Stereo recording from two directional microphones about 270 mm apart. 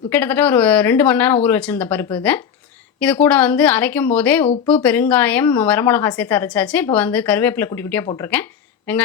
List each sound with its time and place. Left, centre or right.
0.1 s a woman's voice: centre